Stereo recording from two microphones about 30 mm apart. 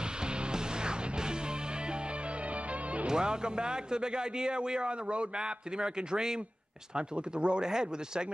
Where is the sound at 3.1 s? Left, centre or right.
Right.